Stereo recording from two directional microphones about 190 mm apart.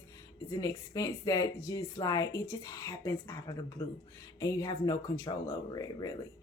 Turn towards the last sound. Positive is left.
turn(degrees=20)  # may be behind; listen again after turning